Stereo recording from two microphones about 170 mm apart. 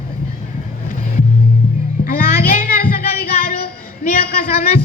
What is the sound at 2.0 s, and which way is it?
Child singing, 55° left (ahead or behind).